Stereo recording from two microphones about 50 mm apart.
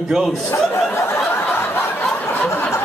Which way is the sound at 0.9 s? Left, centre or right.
Left.